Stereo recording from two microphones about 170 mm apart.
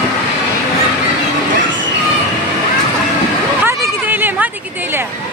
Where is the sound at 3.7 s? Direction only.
10° right (ahead or behind).